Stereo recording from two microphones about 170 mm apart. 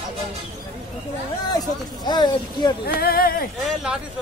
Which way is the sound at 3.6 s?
5° right (ahead or behind).